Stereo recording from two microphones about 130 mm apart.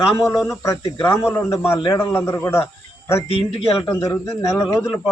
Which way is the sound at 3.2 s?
45° left (ahead or behind).